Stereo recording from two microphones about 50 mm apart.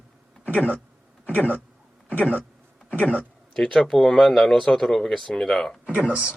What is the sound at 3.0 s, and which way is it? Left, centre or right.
Speech, left.